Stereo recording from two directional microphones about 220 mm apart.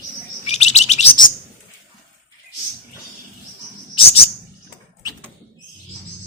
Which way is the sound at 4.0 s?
25° left (ahead or behind).